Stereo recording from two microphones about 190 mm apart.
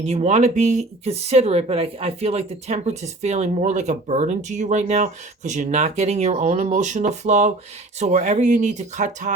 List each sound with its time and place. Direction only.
0.0 s speech: 35° right (ahead or behind)